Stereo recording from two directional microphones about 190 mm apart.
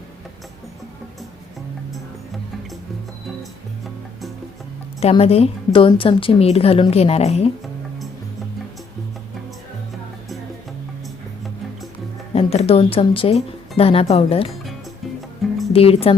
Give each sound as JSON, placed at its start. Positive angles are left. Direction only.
{"t": 4.9, "sound": "a woman's voice", "side_deg": 35}
{"t": 12.3, "sound": "a woman's voice", "side_deg": 30}
{"t": 15.7, "sound": "a woman's voice", "side_deg": 30}